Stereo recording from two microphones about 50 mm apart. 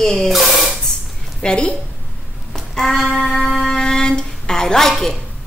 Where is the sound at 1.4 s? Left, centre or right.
Centre.